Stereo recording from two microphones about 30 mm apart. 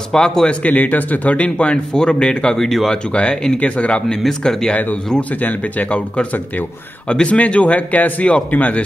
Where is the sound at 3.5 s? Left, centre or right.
Left.